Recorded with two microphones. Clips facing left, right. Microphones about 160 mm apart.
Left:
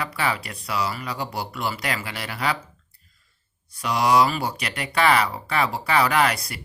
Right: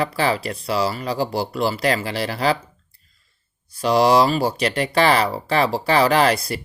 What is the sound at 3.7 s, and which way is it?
A man's voice, 30° right (ahead or behind).